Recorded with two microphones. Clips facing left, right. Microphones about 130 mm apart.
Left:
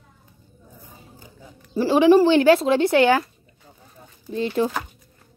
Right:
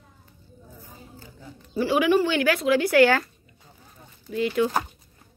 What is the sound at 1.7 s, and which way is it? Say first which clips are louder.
Speech: left 6 dB; 30° left (ahead or behind).